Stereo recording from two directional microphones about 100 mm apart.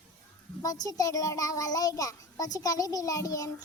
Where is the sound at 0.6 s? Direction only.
35° left (ahead or behind).